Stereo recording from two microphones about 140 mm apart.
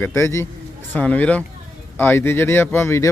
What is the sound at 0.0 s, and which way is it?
Speech, 20° left (ahead or behind).